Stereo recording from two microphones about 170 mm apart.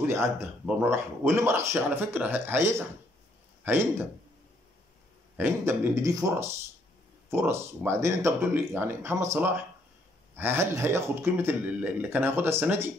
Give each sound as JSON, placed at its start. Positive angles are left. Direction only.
{"t": 0.0, "sound": "speech", "side_deg": -15}
{"t": 3.6, "sound": "speech", "side_deg": -10}
{"t": 5.4, "sound": "speech", "side_deg": -15}